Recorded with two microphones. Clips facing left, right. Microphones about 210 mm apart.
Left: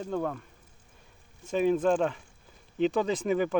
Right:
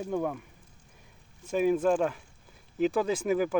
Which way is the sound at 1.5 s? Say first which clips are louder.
Even; 10° right (ahead or behind).